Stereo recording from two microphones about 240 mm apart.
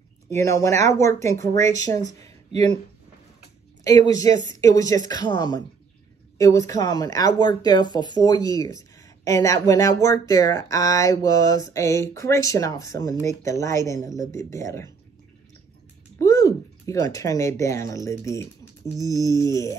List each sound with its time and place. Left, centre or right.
0.3 s speech: centre
3.8 s speech: centre
16.2 s speech: centre